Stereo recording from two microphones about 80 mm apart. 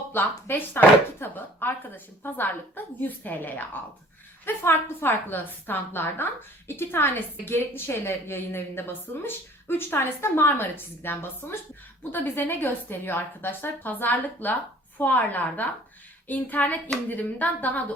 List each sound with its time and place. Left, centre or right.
0.1 s a woman's voice: left